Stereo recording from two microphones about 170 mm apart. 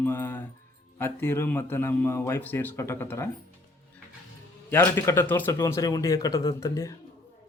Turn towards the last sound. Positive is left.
turn(degrees=20)  # may be behind; listen again after turning